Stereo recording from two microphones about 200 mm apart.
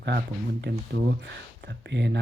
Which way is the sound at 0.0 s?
55° right (ahead or behind).